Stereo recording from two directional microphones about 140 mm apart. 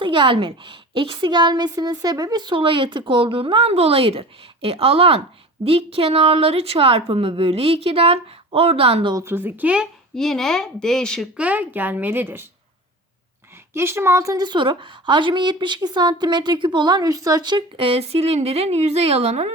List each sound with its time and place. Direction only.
0.0 s a woman's voice: 35° right (ahead or behind)
9.1 s speech: 15° right (ahead or behind); by 11.3 s 5° left (ahead or behind)
11.3 s speech: 10° right (ahead or behind)
13.7 s a woman's voice: 20° right (ahead or behind); by 19.5 s 50° right (ahead or behind)